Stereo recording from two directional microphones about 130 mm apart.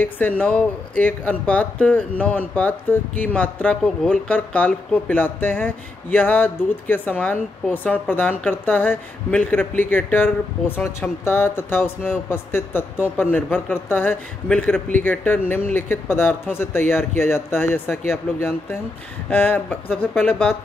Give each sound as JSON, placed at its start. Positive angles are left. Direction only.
{"t": 0.0, "sound": "speech", "side_deg": 15}